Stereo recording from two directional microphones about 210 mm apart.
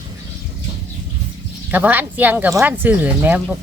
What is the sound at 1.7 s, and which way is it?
Speech, 10° right (ahead or behind).